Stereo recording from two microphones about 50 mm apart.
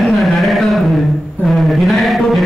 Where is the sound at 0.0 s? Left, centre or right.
Centre.